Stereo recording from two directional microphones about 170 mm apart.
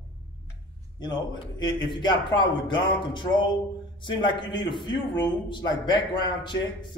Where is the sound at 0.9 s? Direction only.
25° left (ahead or behind).